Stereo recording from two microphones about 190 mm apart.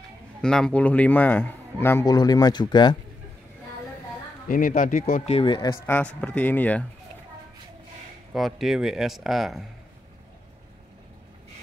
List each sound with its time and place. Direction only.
0.4 s a man's voice: 5° left (ahead or behind); by 3.0 s 25° left (ahead or behind)
4.5 s speech: 45° left (ahead or behind)
5.3 s a man's voice: 25° left (ahead or behind); by 6.8 s 10° left (ahead or behind)
8.3 s speech: centre (ahead or behind)